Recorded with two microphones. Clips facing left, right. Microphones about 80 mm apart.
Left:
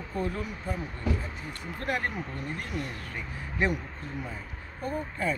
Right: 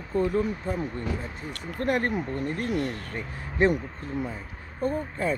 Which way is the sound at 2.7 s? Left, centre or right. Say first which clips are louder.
Right 9 dB; right.